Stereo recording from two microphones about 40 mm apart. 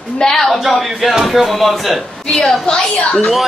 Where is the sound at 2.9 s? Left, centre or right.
Left.